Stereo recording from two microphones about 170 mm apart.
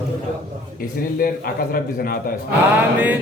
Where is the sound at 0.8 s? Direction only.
60° left (ahead or behind).